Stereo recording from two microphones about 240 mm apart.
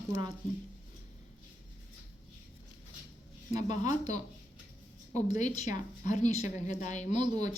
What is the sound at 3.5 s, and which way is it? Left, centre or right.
A woman's voice, left.